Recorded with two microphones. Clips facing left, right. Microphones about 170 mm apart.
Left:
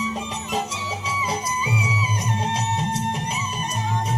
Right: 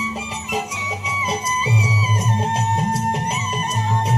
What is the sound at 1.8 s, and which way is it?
Music, 40° right (ahead or behind).